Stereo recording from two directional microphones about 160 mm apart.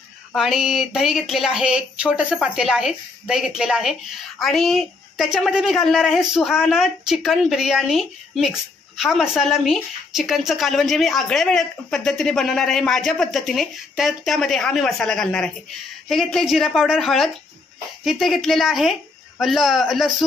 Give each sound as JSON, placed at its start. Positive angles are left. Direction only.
{"t": 0.3, "sound": "speech", "side_deg": 0}